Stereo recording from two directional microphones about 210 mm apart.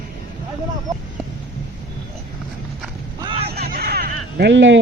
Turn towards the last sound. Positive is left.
turn(degrees=-60)  # may be behind; listen again after turning